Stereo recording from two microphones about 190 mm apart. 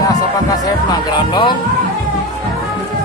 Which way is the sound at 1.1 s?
25° left (ahead or behind).